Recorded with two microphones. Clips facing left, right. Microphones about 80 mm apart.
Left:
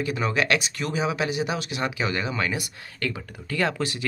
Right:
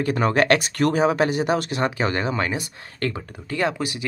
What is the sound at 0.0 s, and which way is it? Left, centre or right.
Speech, right.